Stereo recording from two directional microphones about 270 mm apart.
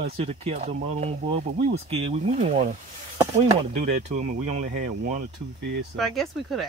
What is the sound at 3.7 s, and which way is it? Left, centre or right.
Speech, right.